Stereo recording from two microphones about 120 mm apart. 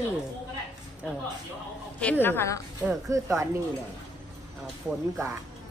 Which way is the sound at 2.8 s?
10° right (ahead or behind).